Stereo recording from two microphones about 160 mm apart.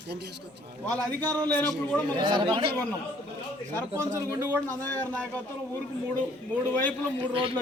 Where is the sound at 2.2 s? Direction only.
30° right (ahead or behind).